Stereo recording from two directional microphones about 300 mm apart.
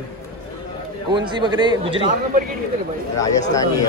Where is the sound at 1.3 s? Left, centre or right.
Centre.